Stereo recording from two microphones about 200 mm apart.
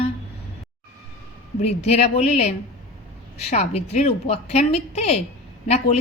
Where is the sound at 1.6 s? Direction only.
35° left (ahead or behind).